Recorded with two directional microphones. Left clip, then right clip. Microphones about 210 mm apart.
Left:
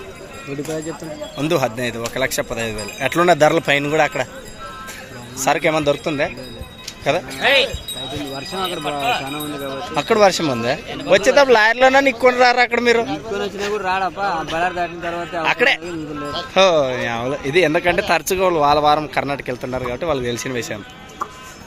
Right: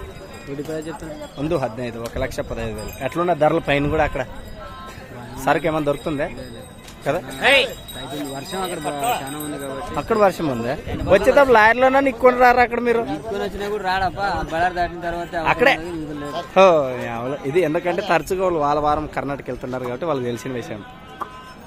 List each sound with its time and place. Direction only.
1.4 s a man's voice: 5° left (ahead or behind)
3.7 s a man's voice: centre (ahead or behind)
5.4 s a man's voice: 5° right (ahead or behind)
7.3 s speech: 15° right (ahead or behind)
9.9 s a man's voice: centre (ahead or behind)